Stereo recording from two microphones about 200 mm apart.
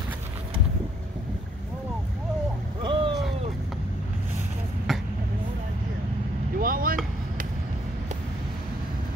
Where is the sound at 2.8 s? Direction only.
25° right (ahead or behind).